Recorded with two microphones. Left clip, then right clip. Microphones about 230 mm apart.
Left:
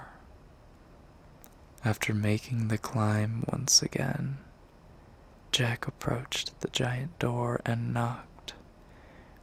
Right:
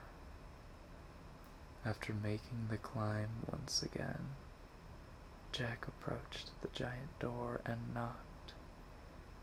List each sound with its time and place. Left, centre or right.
1.8 s speech: left
5.5 s speech: left